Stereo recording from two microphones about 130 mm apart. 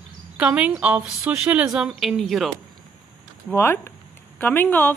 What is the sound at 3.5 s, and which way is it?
A woman's voice, 20° left (ahead or behind).